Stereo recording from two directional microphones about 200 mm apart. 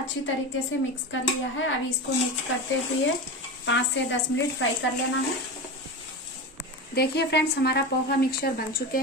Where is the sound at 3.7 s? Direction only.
65° left (ahead or behind).